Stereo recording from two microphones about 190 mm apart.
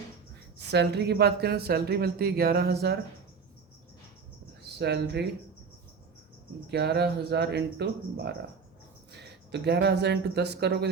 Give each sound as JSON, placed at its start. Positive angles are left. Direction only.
{"t": 0.7, "sound": "speech", "side_deg": -60}
{"t": 4.7, "sound": "speech", "side_deg": -60}
{"t": 6.7, "sound": "speech", "side_deg": -60}